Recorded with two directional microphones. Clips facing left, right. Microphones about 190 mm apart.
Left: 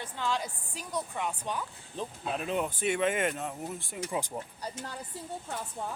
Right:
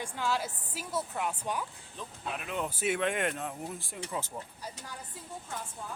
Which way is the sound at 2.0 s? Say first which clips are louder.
Left 5 dB; 30° left (ahead or behind).